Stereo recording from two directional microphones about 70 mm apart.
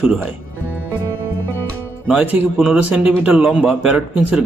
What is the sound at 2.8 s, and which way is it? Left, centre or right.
Speech, right.